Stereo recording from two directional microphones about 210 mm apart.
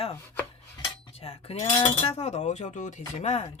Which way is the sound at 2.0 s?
30° left (ahead or behind).